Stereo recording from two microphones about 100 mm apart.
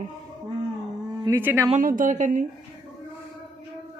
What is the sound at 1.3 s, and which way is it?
Speech, 40° right (ahead or behind).